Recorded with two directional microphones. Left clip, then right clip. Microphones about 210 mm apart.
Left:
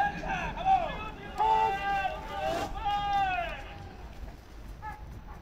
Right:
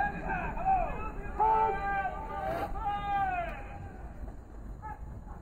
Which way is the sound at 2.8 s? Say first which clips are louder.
Left 3 dB; 25° left (ahead or behind).